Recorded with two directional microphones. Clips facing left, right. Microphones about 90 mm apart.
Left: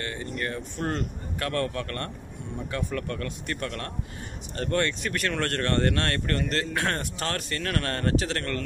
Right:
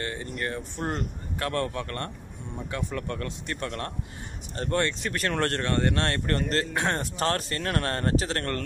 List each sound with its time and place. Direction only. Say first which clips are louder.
0.0 s speech: even; 30° right (ahead or behind)
5.6 s speech: left 1 dB; 10° right (ahead or behind)
5.9 s speech: even; 25° right (ahead or behind)